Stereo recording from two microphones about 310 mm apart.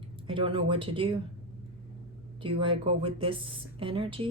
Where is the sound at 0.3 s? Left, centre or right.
Centre.